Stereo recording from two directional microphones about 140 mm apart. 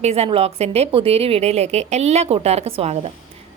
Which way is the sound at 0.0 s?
50° right (ahead or behind).